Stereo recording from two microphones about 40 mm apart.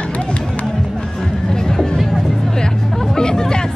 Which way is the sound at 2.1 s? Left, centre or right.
Centre.